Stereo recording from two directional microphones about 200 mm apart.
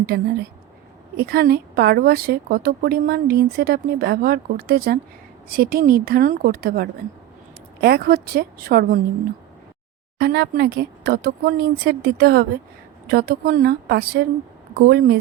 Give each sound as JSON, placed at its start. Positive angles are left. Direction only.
{"t": 1.1, "sound": "a woman's voice", "side_deg": -50}
{"t": 10.2, "sound": "a woman's voice", "side_deg": -55}